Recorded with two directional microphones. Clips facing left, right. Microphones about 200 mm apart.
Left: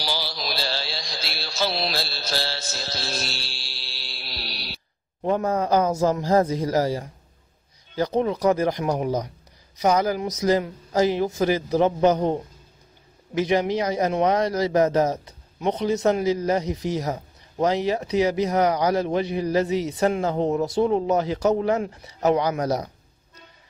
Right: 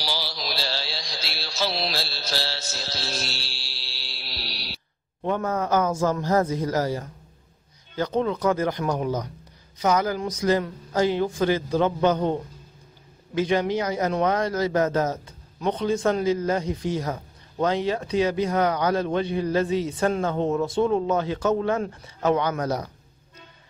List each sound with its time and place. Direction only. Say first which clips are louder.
0.0 s mantra: left 2 dB; 50° left (ahead or behind)
5.2 s a man's voice: left 3 dB; 30° left (ahead or behind)
8.5 s a man's voice: left 2 dB; 20° left (ahead or behind)
11.8 s a man's voice: left 4 dB; 30° left (ahead or behind)
13.5 s a man's voice: left 2 dB; 20° left (ahead or behind)